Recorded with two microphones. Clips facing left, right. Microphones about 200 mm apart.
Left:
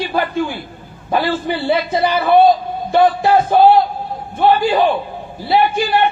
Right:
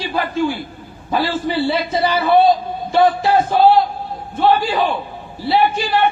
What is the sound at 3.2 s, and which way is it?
Music, 55° left (ahead or behind).